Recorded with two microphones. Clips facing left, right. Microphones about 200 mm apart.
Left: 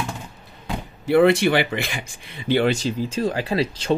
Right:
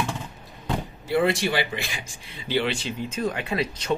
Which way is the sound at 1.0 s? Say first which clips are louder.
Left 7 dB; 60° left (ahead or behind).